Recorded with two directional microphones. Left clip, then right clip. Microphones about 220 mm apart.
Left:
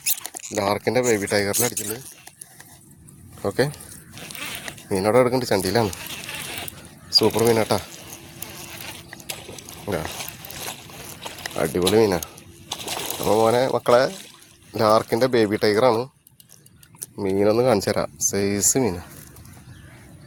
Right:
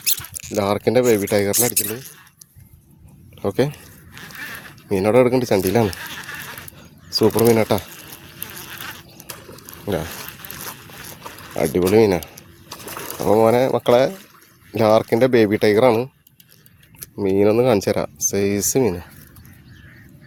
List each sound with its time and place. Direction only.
0.5 s speech: 30° right (ahead or behind)
3.4 s speech: 25° right (ahead or behind)
4.9 s speech: 30° right (ahead or behind)
7.1 s speech: 30° right (ahead or behind)
8.4 s insect: 35° right (ahead or behind)
9.9 s speech: 35° right (ahead or behind)
11.5 s speech: 30° right (ahead or behind)
17.2 s speech: 30° right (ahead or behind)